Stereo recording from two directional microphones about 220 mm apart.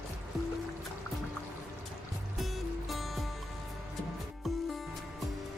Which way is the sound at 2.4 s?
Centre (ahead or behind).